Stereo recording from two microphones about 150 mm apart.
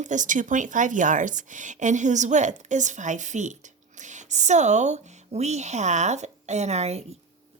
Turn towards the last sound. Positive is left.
turn(degrees=-45)  # may be behind; listen again after turning